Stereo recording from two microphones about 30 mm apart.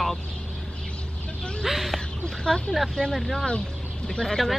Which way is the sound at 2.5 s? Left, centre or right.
Left.